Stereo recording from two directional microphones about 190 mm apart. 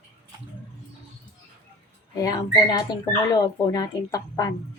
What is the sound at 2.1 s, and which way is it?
Speech, 20° left (ahead or behind).